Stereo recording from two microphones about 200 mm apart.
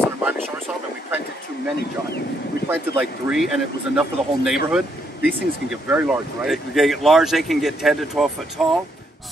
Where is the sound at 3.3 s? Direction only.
10° right (ahead or behind).